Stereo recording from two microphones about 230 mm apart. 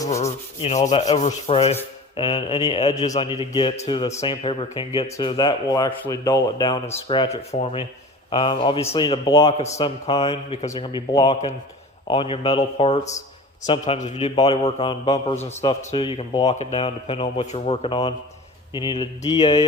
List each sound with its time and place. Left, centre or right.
0.3 s speech: left
0.8 s speech: centre
16.5 s speech: left